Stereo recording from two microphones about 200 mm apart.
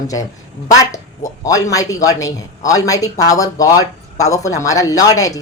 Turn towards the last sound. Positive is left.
turn(degrees=15)  # may be behind; listen again after turning